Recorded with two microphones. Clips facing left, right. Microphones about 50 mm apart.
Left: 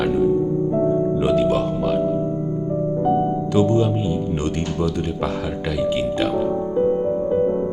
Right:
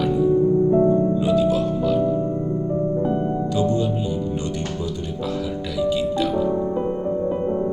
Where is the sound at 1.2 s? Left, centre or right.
Left.